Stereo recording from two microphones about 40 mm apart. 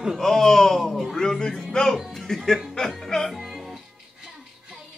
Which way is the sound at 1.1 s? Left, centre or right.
Centre.